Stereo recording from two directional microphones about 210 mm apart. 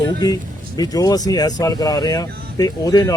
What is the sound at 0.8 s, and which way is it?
Speech, 15° left (ahead or behind).